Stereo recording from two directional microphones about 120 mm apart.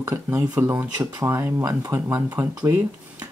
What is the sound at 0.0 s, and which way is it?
Speech, 20° right (ahead or behind).